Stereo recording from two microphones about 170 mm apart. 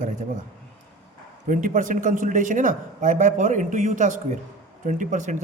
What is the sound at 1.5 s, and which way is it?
A man's voice, 50° right (ahead or behind).